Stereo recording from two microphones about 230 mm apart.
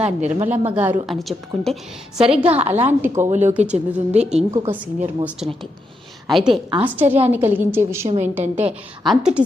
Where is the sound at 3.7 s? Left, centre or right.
Centre.